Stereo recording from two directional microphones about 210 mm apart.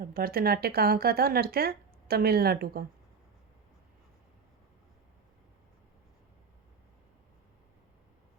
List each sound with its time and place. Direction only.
0.0 s speech: 45° right (ahead or behind)